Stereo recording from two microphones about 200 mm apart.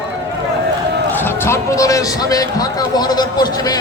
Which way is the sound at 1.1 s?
10° left (ahead or behind).